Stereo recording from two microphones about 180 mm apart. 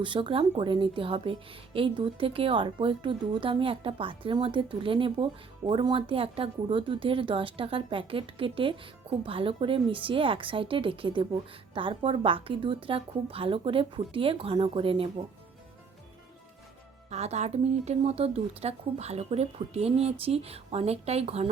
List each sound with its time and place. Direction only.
0.0 s a woman's voice: 30° right (ahead or behind)
17.1 s speech: 40° right (ahead or behind)